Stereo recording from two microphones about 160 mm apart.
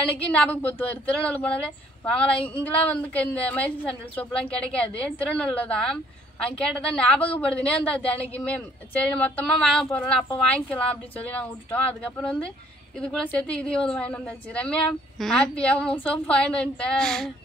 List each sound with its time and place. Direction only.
0.1 s a woman's voice: 10° left (ahead or behind)